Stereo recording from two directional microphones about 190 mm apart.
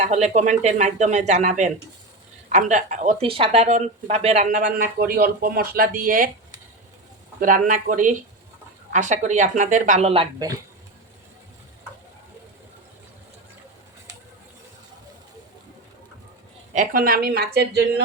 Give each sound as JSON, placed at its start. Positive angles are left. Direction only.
{"t": 0.0, "sound": "speech", "side_deg": -35}
{"t": 7.3, "sound": "a woman's voice", "side_deg": -45}
{"t": 16.7, "sound": "a woman's voice", "side_deg": -50}